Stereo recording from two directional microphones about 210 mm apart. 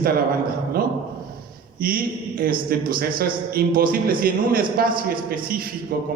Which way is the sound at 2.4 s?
45° right (ahead or behind).